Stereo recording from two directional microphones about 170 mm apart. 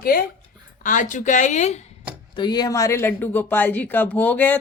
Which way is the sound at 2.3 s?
25° left (ahead or behind).